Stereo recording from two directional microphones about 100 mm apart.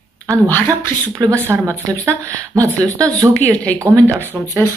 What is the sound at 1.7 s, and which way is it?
Speech, 30° right (ahead or behind).